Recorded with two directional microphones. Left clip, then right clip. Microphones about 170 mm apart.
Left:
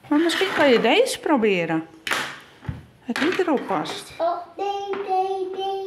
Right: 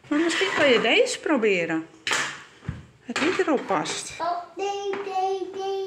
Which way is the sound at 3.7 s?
5° left (ahead or behind).